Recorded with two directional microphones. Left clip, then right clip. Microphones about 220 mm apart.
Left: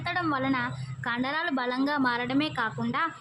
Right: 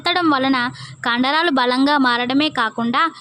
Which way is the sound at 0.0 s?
45° right (ahead or behind).